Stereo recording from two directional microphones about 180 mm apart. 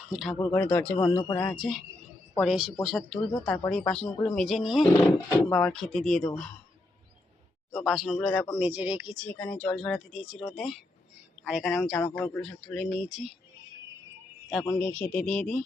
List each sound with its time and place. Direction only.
0.1 s speech: centre (ahead or behind)
0.3 s speech: 10° left (ahead or behind)
0.9 s speech: 25° left (ahead or behind)
1.4 s speech: 5° left (ahead or behind)
7.7 s speech: centre (ahead or behind)
9.1 s speech: 5° left (ahead or behind)
14.8 s speech: 10° left (ahead or behind)